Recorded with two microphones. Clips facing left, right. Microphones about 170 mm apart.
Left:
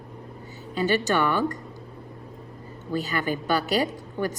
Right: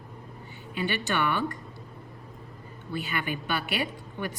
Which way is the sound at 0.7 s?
40° left (ahead or behind).